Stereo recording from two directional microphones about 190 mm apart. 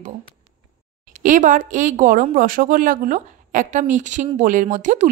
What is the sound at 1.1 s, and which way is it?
A woman's voice, 40° right (ahead or behind).